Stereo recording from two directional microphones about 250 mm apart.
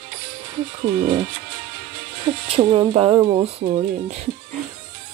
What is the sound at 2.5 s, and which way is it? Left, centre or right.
Speech, centre.